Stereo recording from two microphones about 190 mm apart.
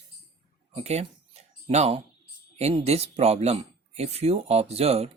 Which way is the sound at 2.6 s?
35° right (ahead or behind).